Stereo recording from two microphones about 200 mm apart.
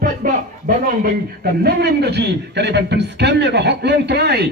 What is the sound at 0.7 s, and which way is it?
A man's voice, 45° right (ahead or behind).